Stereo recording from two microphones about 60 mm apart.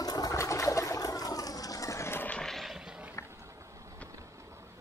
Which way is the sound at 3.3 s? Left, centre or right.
Right.